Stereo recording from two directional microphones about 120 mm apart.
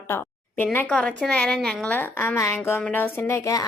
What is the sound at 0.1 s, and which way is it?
Speech, 15° left (ahead or behind).